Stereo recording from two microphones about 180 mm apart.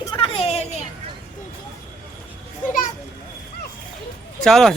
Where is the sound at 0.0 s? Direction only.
25° left (ahead or behind).